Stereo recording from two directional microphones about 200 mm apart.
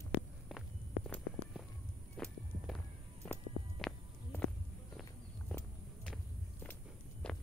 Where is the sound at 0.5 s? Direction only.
Centre (ahead or behind).